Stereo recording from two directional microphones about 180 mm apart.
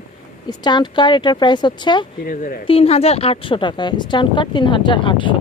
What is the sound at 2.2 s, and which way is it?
Speech, 50° left (ahead or behind).